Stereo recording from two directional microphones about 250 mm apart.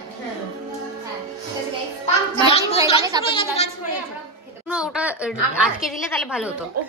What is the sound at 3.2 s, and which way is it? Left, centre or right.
Speech, left.